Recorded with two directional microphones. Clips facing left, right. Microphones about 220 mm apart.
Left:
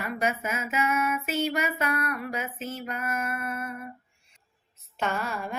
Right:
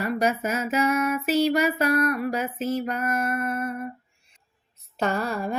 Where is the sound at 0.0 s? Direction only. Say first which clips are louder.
Right 5 dB; 40° right (ahead or behind).